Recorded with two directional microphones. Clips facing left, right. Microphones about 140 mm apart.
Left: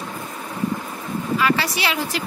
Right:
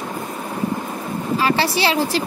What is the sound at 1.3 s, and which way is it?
Speech, 30° right (ahead or behind).